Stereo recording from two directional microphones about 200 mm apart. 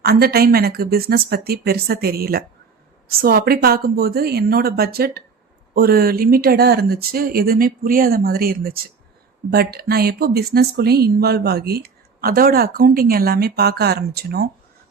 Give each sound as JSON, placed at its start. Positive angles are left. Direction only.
{"t": 0.0, "sound": "speech", "side_deg": -50}